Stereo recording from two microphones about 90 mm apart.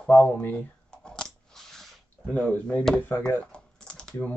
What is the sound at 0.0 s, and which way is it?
Speech, 20° left (ahead or behind).